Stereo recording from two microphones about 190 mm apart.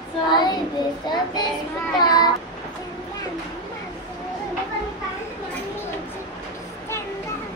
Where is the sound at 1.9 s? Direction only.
20° left (ahead or behind).